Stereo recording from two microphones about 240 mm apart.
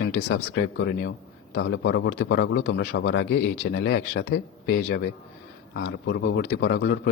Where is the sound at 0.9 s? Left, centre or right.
Left.